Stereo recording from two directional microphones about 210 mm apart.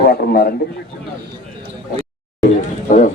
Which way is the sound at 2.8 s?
40° left (ahead or behind).